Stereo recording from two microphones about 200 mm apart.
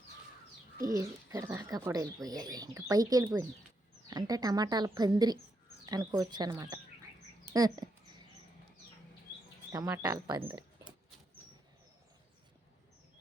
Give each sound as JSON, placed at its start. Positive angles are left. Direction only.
{"t": 0.8, "sound": "a woman's voice", "side_deg": -15}
{"t": 9.7, "sound": "speech", "side_deg": -15}